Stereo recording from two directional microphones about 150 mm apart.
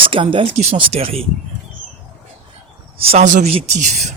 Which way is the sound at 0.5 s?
45° right (ahead or behind).